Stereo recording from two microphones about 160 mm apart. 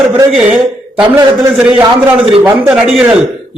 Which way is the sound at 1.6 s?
10° right (ahead or behind).